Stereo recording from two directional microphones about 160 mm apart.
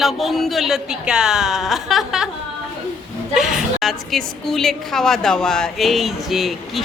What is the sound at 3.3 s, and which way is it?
A woman's voice, centre (ahead or behind).